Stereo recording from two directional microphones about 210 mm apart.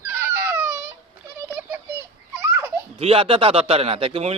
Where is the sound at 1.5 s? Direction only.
10° right (ahead or behind).